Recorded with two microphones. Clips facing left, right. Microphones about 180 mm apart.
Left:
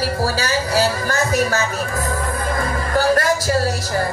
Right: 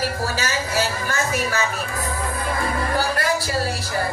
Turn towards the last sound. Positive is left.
turn(degrees=45)  # may be behind; listen again after turning